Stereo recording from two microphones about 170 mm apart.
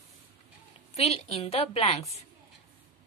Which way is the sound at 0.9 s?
40° left (ahead or behind).